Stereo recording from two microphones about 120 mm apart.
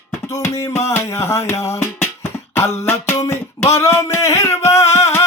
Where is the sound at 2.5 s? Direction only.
20° left (ahead or behind).